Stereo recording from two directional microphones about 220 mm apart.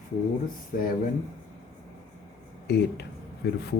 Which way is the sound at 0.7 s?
40° left (ahead or behind).